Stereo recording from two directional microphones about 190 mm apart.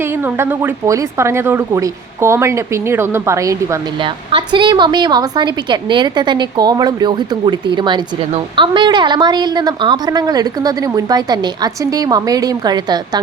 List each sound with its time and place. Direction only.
0.3 s a woman's voice: 10° right (ahead or behind)